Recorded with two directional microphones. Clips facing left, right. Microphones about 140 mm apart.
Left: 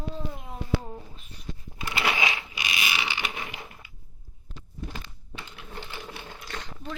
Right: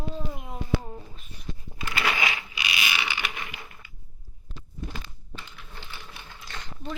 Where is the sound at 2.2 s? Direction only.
15° left (ahead or behind).